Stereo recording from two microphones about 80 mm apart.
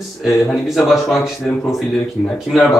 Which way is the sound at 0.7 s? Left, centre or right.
Centre.